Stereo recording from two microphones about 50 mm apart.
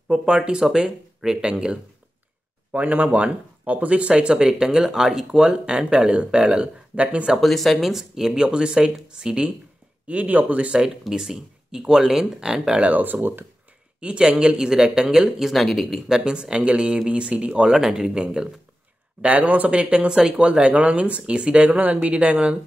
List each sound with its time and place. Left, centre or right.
0.1 s speech: centre
2.7 s speech: right
7.3 s speech: centre
10.0 s speech: right
10.8 s speech: centre
12.8 s speech: right
14.0 s speech: centre
16.3 s speech: centre
17.6 s speech: centre
19.2 s speech: right